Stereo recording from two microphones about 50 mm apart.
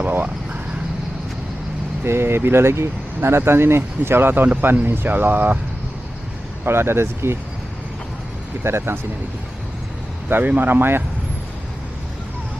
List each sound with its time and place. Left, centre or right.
2.0 s speech: right
6.7 s speech: right
8.6 s speech: right
10.2 s speech: right